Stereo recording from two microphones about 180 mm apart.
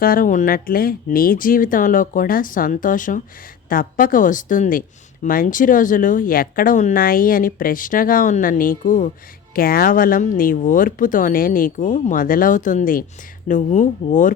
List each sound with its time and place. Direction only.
0.0 s speech: 50° left (ahead or behind)